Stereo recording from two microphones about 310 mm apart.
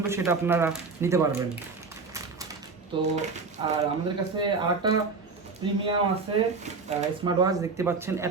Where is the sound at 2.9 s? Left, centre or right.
Centre.